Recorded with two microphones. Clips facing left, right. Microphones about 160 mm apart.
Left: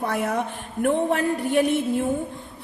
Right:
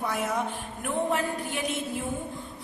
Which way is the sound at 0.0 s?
65° left (ahead or behind).